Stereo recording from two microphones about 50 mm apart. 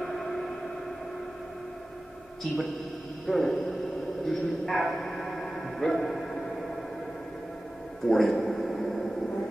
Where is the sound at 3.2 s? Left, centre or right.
Centre.